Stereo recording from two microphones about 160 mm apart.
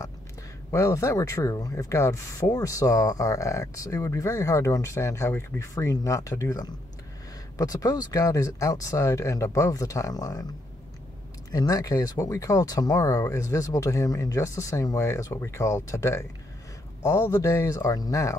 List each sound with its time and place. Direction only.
0.7 s speech: 20° left (ahead or behind)
11.5 s speech: 20° left (ahead or behind)